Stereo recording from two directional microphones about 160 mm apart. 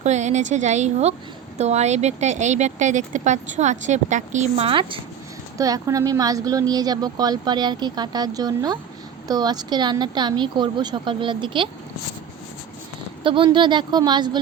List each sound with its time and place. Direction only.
0.0 s speech: 45° right (ahead or behind)
5.5 s speech: 20° right (ahead or behind)
13.2 s speech: 30° right (ahead or behind)